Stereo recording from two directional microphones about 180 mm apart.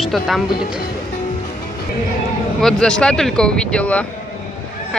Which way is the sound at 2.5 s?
5° left (ahead or behind).